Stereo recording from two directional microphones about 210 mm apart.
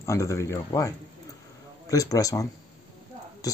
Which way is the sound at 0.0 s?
15° left (ahead or behind).